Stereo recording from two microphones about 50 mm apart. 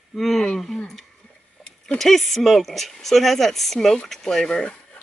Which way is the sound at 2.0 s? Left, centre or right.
Centre.